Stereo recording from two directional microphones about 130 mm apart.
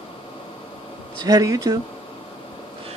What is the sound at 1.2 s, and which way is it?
Speech, 30° right (ahead or behind).